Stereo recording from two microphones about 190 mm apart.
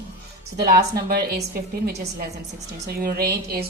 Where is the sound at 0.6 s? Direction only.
55° right (ahead or behind).